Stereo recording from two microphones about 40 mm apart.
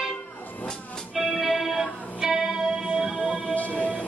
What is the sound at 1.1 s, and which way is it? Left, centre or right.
Music, centre.